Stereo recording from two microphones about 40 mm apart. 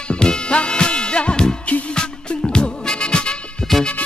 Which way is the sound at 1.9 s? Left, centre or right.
Left.